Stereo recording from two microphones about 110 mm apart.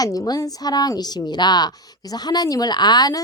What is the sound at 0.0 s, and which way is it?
A woman's voice, 35° left (ahead or behind).